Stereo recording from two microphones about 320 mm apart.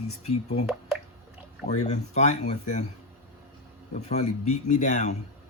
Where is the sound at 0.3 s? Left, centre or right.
Centre.